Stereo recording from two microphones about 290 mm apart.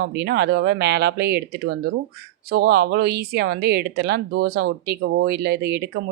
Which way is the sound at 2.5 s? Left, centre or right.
Right.